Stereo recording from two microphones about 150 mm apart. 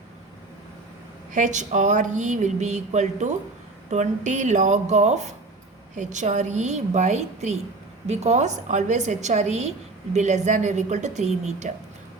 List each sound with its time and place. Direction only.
1.3 s a woman's voice: 55° right (ahead or behind)